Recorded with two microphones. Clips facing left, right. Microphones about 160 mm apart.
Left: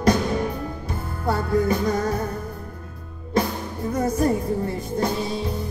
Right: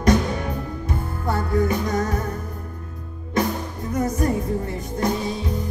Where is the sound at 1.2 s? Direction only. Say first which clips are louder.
Left 1 dB; 30° left (ahead or behind).